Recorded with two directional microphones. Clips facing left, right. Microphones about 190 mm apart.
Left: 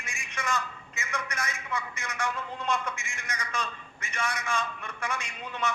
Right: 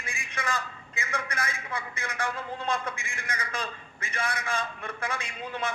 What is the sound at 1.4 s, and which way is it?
A man's voice, 55° right (ahead or behind).